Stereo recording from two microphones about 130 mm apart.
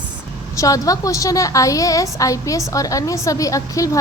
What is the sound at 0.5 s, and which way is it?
A woman's voice, 25° left (ahead or behind).